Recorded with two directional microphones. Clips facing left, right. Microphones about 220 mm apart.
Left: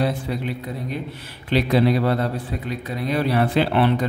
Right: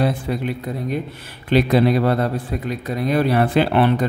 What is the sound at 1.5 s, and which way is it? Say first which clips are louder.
Speech: right 3 dB; 50° right (ahead or behind).